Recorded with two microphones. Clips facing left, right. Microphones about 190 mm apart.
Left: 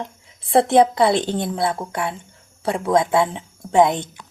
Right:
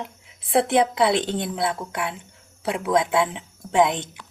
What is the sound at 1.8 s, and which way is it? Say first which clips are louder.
Speech: left 3 dB; 25° left (ahead or behind).